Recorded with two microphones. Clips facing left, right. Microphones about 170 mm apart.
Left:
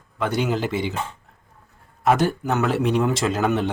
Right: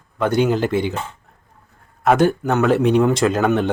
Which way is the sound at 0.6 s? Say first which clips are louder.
Right 5 dB; 55° right (ahead or behind).